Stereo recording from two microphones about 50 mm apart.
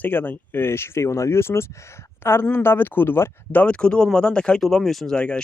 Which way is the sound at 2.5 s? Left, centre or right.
Left.